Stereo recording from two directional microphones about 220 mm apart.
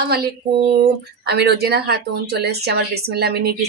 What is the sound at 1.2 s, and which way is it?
Speech, 50° right (ahead or behind).